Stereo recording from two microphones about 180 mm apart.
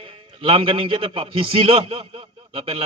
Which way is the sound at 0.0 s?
30° right (ahead or behind).